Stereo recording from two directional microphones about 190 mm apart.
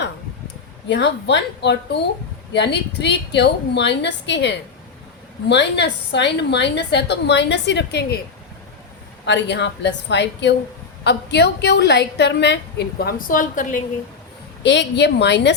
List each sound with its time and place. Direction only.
0.9 s a woman's voice: 65° left (ahead or behind)
9.2 s a woman's voice: 65° left (ahead or behind); by 13.8 s 40° left (ahead or behind)
14.6 s a woman's voice: 65° left (ahead or behind)